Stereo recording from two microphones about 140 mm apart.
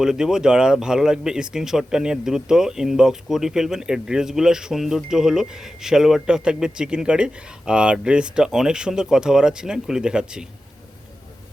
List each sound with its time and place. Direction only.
0.0 s speech: 5° right (ahead or behind)